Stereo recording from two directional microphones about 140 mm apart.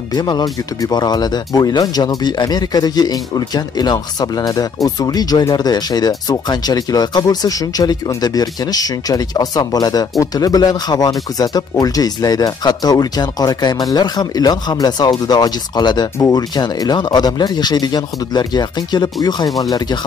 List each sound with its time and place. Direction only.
0.1 s speech: 30° left (ahead or behind)